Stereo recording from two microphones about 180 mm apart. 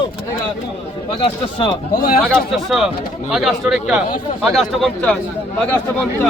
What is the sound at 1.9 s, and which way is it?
Speech, 50° left (ahead or behind).